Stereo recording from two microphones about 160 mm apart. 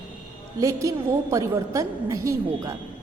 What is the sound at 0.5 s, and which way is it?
A woman's voice, 20° right (ahead or behind).